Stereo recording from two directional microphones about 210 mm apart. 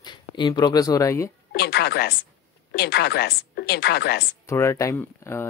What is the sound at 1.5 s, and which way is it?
A woman's voice, 50° left (ahead or behind).